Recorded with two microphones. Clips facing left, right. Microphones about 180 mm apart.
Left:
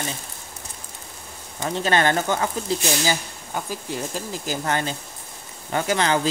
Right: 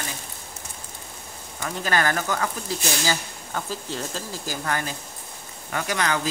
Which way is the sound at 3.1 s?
15° left (ahead or behind).